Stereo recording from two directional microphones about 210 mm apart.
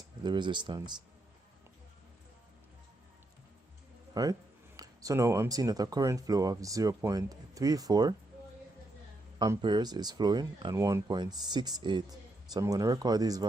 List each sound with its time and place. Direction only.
0.2 s speech: 20° right (ahead or behind)
4.1 s speech: 15° right (ahead or behind)
9.4 s speech: 20° right (ahead or behind)